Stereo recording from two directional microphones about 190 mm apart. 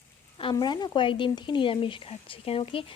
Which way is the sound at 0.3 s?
25° left (ahead or behind).